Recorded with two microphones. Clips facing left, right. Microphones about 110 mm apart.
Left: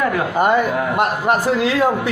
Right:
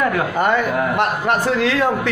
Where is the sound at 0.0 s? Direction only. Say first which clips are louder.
Left 1 dB; 10° left (ahead or behind).